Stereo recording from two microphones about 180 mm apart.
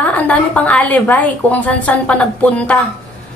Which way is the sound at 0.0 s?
5° left (ahead or behind).